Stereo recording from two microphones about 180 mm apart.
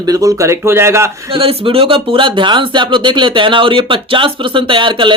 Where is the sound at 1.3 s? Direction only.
30° right (ahead or behind).